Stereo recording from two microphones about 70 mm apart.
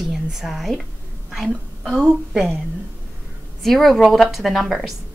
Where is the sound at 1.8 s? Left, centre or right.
Centre.